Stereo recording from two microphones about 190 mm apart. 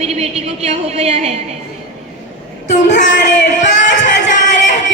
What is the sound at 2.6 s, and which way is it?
Speech, 40° left (ahead or behind).